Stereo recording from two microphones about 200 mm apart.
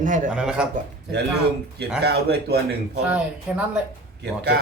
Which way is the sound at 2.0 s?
55° right (ahead or behind).